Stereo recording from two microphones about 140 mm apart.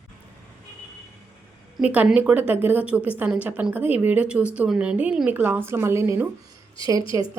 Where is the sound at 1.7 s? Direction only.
10° right (ahead or behind).